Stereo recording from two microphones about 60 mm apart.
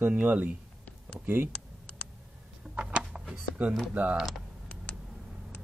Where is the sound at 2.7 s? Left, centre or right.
Right.